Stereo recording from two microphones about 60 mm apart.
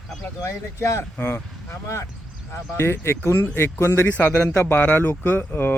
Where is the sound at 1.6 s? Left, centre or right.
Left.